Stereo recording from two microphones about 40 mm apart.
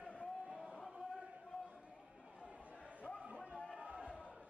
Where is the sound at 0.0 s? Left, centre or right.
Left.